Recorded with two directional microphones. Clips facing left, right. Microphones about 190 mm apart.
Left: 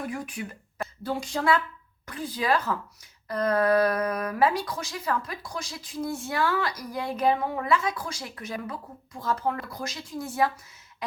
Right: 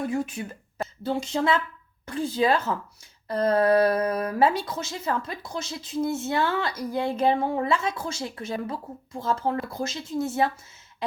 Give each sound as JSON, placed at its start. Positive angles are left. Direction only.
{"t": 0.1, "sound": "speech", "side_deg": -25}